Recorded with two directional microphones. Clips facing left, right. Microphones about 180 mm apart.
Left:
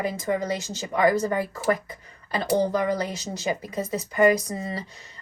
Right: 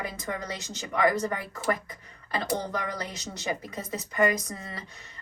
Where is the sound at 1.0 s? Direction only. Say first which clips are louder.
Left 4 dB; 30° left (ahead or behind).